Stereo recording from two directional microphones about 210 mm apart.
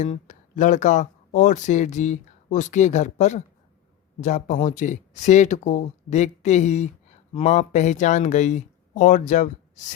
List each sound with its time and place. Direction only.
0.0 s speech: 35° left (ahead or behind)